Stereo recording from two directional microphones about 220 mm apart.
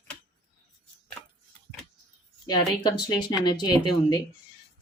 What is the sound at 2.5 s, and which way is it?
Speech, 20° left (ahead or behind).